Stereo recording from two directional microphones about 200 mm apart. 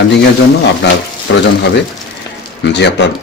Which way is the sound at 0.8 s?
60° left (ahead or behind).